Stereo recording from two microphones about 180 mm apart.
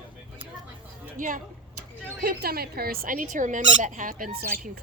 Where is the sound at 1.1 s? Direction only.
45° right (ahead or behind).